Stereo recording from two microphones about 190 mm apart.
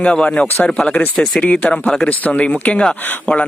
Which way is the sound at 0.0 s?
5° left (ahead or behind).